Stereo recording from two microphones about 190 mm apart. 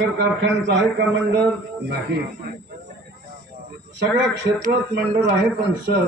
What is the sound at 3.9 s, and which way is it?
Speech, 70° right (ahead or behind).